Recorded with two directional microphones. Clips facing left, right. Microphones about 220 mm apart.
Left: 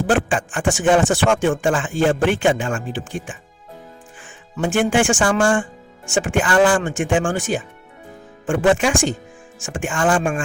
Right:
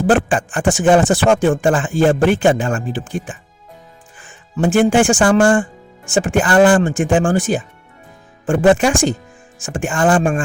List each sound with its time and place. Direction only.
0.1 s speech: 40° right (ahead or behind)
4.5 s speech: 40° right (ahead or behind)